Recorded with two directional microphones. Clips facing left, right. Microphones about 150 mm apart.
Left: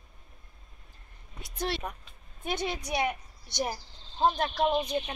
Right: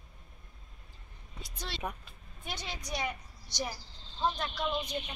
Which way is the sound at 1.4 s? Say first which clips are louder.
Left 10 dB; 55° left (ahead or behind).